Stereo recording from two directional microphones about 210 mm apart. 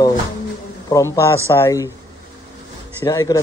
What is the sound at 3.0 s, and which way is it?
Speech, 15° left (ahead or behind).